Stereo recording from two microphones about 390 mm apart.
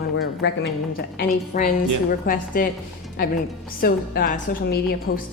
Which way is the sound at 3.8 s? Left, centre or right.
Left.